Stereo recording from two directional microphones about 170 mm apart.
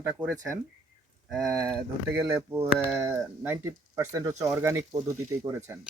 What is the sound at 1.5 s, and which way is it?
Speech, 15° right (ahead or behind).